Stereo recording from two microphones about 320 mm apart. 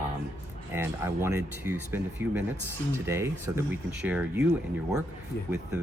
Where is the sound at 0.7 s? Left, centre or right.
Centre.